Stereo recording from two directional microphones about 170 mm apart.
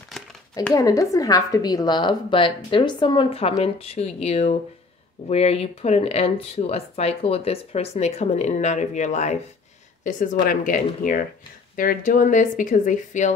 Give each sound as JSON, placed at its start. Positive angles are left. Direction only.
{"t": 0.7, "sound": "a woman's voice", "side_deg": 20}